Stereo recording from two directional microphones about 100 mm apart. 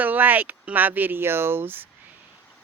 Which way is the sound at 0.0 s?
15° right (ahead or behind).